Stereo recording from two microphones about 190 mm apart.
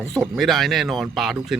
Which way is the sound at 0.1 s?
Centre (ahead or behind).